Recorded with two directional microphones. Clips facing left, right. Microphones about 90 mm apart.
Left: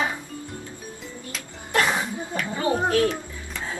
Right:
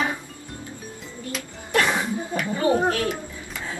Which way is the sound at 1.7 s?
25° left (ahead or behind).